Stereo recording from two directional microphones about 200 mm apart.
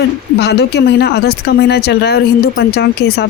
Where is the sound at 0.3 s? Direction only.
55° left (ahead or behind).